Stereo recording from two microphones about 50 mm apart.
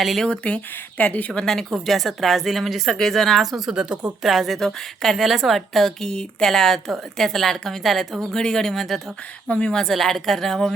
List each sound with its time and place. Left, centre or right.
0.3 s speech: left
1.3 s a woman's voice: centre
1.7 s a woman's voice: centre
3.7 s speech: centre
4.2 s a woman's voice: centre
9.5 s speech: left
9.7 s a woman's voice: centre